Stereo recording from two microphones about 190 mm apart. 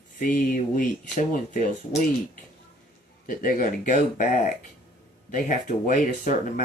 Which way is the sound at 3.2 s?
45° left (ahead or behind).